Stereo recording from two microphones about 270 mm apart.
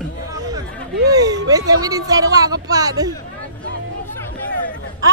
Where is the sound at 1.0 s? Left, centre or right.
Centre.